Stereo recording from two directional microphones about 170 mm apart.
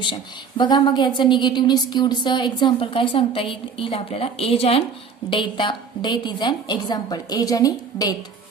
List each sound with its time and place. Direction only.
0.0 s a woman's voice: 25° left (ahead or behind)